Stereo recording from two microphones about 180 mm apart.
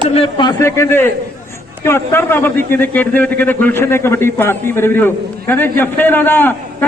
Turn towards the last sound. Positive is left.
turn(degrees=10)  # may be behind; listen again after turning